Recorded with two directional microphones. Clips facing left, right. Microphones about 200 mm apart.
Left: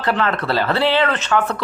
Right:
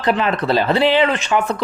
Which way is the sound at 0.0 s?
15° right (ahead or behind).